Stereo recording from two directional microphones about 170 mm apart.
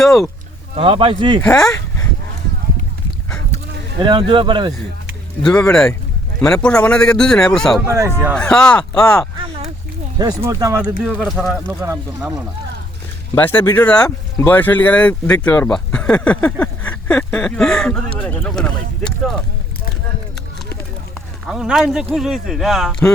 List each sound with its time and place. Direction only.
0.0 s a sound: centre (ahead or behind)
0.8 s speech: 30° right (ahead or behind)
1.4 s speech: 5° left (ahead or behind)
4.0 s speech: 25° right (ahead or behind)
5.4 s speech: 5° left (ahead or behind)
7.9 s speech: 15° right (ahead or behind)
8.4 s speech: 5° left (ahead or behind)
10.2 s speech: 20° right (ahead or behind)
11.0 s speech: centre (ahead or behind)
11.8 s speech: 20° right (ahead or behind)
13.3 s speech: 10° left (ahead or behind)
21.4 s speech: centre (ahead or behind)